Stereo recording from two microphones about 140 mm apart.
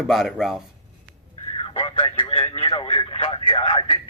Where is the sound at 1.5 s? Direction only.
45° left (ahead or behind).